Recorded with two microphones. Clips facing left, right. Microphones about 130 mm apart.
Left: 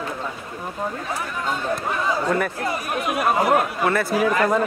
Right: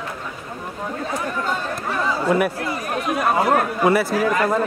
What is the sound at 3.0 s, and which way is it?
Speech, 10° left (ahead or behind).